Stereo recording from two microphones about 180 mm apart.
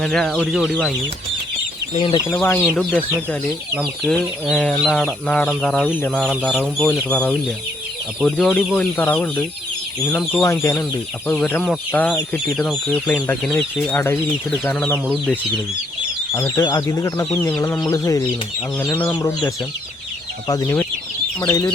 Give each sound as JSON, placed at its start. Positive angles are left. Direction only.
{"t": 0.0, "sound": "speech", "side_deg": 5}
{"t": 1.9, "sound": "speech", "side_deg": 25}
{"t": 2.3, "sound": "speech", "side_deg": 10}
{"t": 10.4, "sound": "speech", "side_deg": 15}
{"t": 14.9, "sound": "speech", "side_deg": -5}
{"t": 16.6, "sound": "speech", "side_deg": 20}
{"t": 17.2, "sound": "speech", "side_deg": 5}
{"t": 20.5, "sound": "speech", "side_deg": 20}